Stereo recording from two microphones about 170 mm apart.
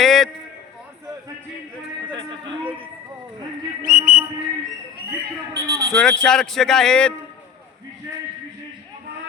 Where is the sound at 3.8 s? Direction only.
55° right (ahead or behind).